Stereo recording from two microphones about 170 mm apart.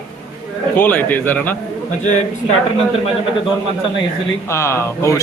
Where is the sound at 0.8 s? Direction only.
10° left (ahead or behind).